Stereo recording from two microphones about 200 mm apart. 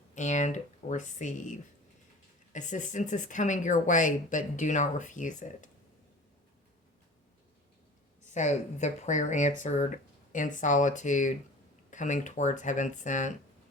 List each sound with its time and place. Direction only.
0.1 s speech: 35° left (ahead or behind)
8.2 s speech: 35° left (ahead or behind)